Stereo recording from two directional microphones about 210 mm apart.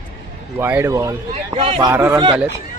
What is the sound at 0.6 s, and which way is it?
Speech, 10° right (ahead or behind).